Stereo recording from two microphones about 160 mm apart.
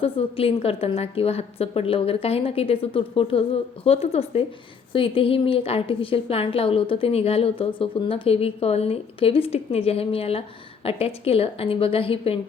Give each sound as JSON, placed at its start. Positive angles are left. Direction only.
{"t": 0.0, "sound": "a woman's voice", "side_deg": 35}